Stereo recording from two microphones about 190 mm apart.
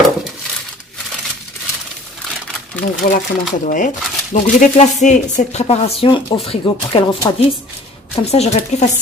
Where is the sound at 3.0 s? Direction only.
45° left (ahead or behind); by 7.4 s 20° left (ahead or behind).